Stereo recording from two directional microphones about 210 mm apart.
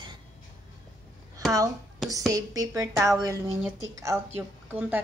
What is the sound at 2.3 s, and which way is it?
A woman's voice, 15° right (ahead or behind).